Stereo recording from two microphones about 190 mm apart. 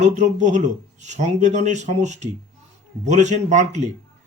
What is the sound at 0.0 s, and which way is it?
Speech, 40° right (ahead or behind).